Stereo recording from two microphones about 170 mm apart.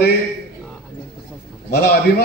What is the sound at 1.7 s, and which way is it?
Speech, 65° left (ahead or behind).